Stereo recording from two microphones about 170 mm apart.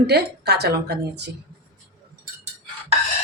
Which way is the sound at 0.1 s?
75° right (ahead or behind).